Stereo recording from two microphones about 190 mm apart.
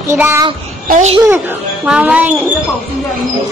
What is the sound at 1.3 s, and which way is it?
A child's voice, 10° right (ahead or behind).